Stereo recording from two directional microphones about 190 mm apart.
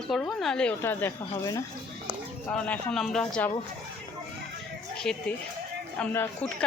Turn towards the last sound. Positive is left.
turn(degrees=10)  # may be behind; listen again after turning